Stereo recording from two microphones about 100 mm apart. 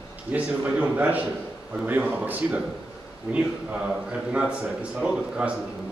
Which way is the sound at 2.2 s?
15° right (ahead or behind).